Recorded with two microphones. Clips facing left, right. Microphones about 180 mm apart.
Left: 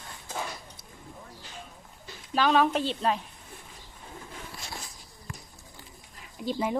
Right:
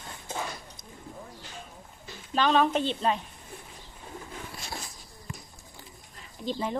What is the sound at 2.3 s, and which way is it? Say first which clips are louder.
Speech: even; 5° left (ahead or behind).